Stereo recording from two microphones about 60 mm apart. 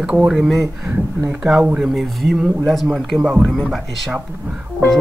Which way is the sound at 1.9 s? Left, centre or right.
Centre.